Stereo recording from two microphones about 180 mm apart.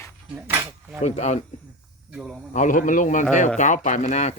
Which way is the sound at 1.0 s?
40° left (ahead or behind).